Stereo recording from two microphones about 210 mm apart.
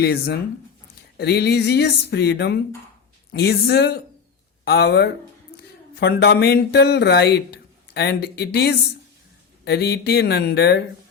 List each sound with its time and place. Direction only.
0.0 s speech: 50° left (ahead or behind)